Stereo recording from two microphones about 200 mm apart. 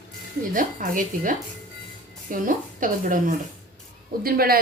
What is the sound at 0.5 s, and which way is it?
Speech, 40° right (ahead or behind).